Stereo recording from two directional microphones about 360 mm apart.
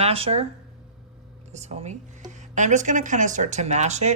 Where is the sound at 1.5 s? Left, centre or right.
Centre.